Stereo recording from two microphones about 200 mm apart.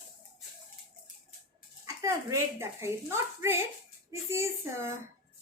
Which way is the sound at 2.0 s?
15° right (ahead or behind).